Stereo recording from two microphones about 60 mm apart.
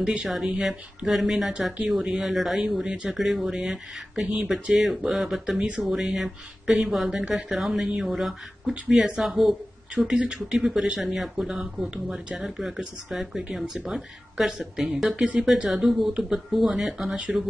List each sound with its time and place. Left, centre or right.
0.0 s speech: centre
2.8 s speech: centre
9.9 s speech: centre
10.9 s speech: centre
15.0 s speech: centre